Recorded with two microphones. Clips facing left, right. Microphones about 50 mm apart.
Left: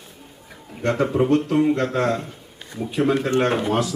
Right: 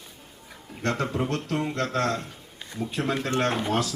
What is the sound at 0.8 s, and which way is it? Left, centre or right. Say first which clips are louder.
Speech: left 8 dB; centre.